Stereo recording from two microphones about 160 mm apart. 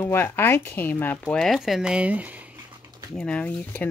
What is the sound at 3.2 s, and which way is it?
Speech, 10° left (ahead or behind).